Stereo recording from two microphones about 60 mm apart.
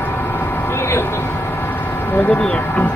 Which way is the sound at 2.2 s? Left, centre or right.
Centre.